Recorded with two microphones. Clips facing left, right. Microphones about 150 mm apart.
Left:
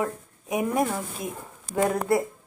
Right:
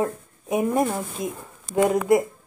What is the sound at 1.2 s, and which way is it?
Speech, 20° right (ahead or behind).